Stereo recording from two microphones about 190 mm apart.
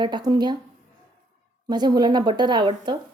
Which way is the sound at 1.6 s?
20° right (ahead or behind).